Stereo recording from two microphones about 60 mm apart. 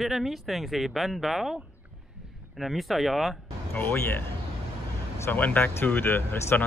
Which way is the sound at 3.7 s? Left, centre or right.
Left.